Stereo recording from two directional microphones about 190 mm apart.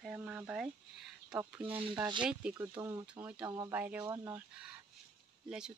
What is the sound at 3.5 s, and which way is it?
Speech, 20° right (ahead or behind).